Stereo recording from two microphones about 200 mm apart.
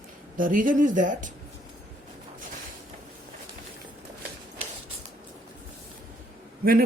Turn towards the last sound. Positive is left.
turn(degrees=-45)  # may be behind; listen again after turning